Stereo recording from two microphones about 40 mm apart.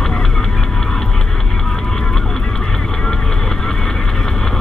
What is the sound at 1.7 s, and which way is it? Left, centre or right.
Vehicle, centre.